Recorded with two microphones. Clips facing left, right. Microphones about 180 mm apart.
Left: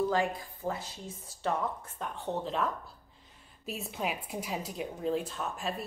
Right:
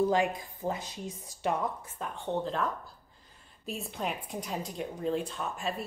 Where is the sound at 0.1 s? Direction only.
20° right (ahead or behind).